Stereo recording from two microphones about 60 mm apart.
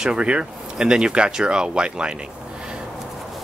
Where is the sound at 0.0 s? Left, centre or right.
Centre.